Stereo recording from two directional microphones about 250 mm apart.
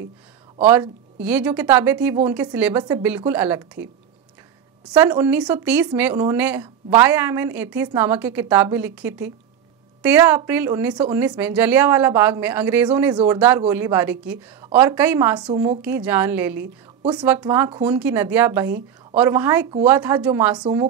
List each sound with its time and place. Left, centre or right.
0.6 s a woman's voice: centre
4.8 s a woman's voice: centre
20.5 s a woman's voice: centre